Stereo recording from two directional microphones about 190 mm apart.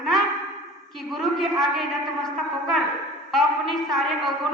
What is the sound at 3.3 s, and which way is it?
A woman's voice, centre (ahead or behind).